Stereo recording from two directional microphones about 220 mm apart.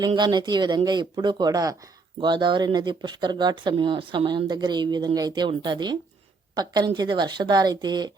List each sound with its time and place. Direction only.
0.0 s speech: 20° right (ahead or behind)